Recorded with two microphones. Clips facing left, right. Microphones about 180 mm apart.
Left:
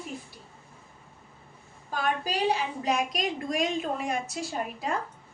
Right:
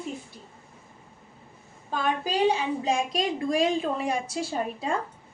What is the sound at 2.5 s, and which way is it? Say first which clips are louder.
A child's voice: right 2 dB; 25° right (ahead or behind).